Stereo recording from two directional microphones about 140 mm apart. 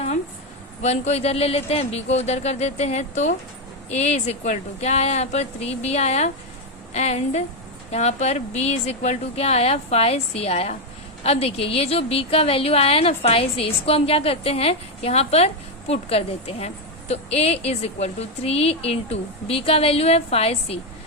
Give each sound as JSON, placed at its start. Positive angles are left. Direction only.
{"t": 0.8, "sound": "a woman's voice", "side_deg": 50}